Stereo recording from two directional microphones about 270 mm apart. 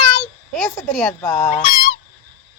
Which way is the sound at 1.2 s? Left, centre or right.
Centre.